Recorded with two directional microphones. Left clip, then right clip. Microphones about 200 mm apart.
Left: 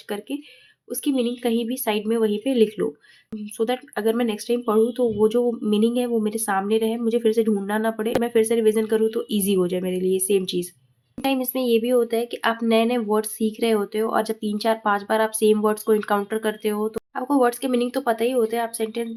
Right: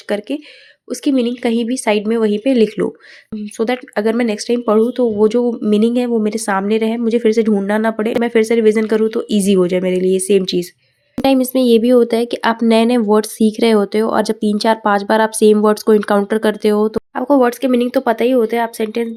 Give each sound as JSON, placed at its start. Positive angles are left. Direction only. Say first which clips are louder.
{"t": 0.1, "sound": "speech", "louder": "right 10 dB", "side_deg": -20}
{"t": 17.2, "sound": "speech", "louder": "right 7 dB", "side_deg": -25}